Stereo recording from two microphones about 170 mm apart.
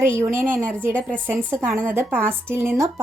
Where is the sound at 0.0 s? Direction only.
15° right (ahead or behind).